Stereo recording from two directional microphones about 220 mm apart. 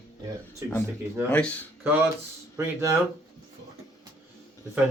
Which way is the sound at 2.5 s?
15° right (ahead or behind).